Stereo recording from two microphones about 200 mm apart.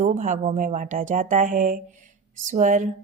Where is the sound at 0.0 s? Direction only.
40° right (ahead or behind).